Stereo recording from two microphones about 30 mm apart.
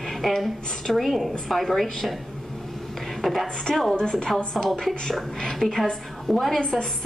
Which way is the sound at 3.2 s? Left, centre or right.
Centre.